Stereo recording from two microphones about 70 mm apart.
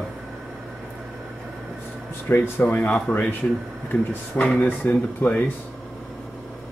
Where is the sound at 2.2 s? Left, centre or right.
Left.